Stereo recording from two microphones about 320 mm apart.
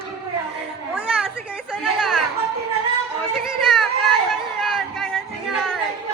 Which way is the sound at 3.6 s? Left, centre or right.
Centre.